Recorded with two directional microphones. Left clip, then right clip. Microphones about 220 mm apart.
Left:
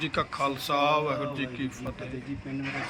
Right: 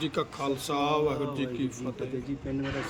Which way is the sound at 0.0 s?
5° right (ahead or behind).